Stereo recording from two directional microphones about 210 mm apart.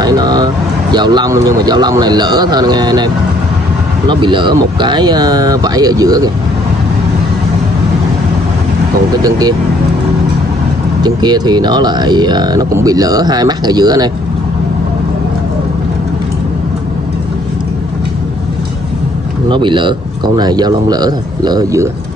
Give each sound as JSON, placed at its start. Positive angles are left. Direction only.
{"t": 0.0, "sound": "speech", "side_deg": -20}
{"t": 4.1, "sound": "speech", "side_deg": -20}
{"t": 9.2, "sound": "speech", "side_deg": -20}
{"t": 11.0, "sound": "speech", "side_deg": -20}
{"t": 19.5, "sound": "speech", "side_deg": -25}